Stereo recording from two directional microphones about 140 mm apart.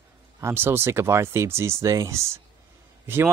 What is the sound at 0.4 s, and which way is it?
Speech, 15° right (ahead or behind).